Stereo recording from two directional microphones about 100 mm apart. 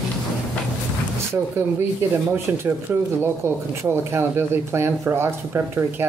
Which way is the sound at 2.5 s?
25° right (ahead or behind).